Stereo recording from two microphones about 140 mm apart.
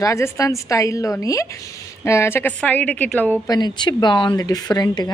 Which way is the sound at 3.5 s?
30° left (ahead or behind).